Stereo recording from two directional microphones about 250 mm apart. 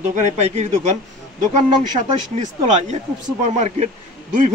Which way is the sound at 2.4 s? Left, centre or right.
Right.